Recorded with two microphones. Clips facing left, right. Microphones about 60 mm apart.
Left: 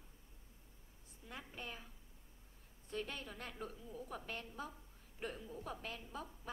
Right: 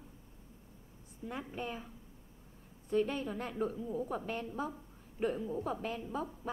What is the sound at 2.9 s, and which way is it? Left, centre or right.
A woman's voice, centre.